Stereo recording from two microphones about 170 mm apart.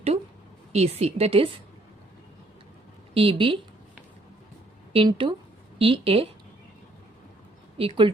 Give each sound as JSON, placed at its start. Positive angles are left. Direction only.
{"t": 0.7, "sound": "a woman's voice", "side_deg": -40}
{"t": 3.2, "sound": "a woman's voice", "side_deg": -30}
{"t": 4.9, "sound": "a woman's voice", "side_deg": -30}
{"t": 7.8, "sound": "a woman's voice", "side_deg": -30}